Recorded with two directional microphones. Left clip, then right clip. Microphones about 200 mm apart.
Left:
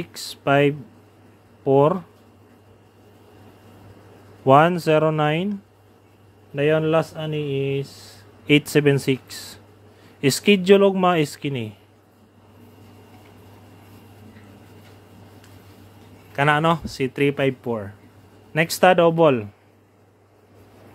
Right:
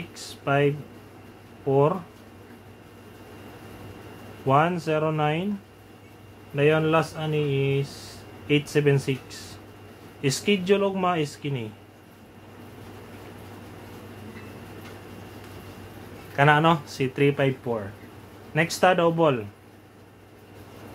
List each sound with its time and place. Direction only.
0.1 s speech: 45° left (ahead or behind)
4.5 s speech: 45° left (ahead or behind)
6.5 s speech: 35° left (ahead or behind)
16.3 s speech: 35° left (ahead or behind)